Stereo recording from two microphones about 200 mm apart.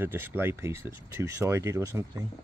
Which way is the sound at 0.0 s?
10° right (ahead or behind).